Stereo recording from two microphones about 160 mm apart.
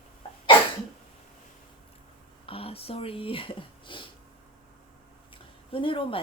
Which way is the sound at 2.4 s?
35° left (ahead or behind).